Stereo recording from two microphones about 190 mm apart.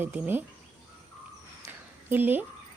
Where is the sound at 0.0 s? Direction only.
10° right (ahead or behind).